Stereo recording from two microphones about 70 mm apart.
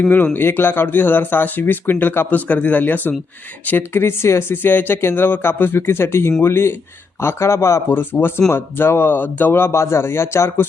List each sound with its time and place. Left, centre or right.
0.3 s speech: left
7.9 s speech: left